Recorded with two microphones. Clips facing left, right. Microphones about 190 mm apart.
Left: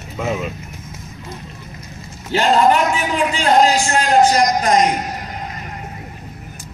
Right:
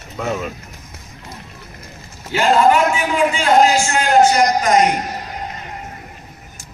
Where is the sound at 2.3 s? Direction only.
35° left (ahead or behind).